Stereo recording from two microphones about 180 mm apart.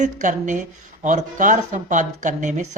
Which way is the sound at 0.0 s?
45° right (ahead or behind).